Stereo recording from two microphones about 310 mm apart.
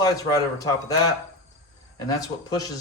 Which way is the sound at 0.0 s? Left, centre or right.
Centre.